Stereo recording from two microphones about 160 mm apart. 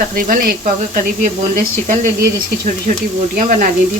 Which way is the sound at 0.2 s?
60° right (ahead or behind).